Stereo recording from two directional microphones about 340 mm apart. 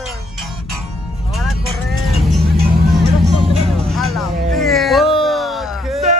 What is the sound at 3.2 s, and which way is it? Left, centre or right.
Music, centre.